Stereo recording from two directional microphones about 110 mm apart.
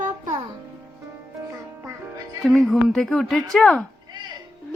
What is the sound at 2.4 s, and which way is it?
Speech, centre (ahead or behind).